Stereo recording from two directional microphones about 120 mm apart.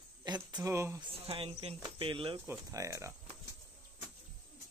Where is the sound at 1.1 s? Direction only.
50° right (ahead or behind).